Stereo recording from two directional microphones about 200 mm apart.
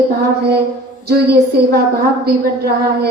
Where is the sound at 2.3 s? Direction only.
50° right (ahead or behind).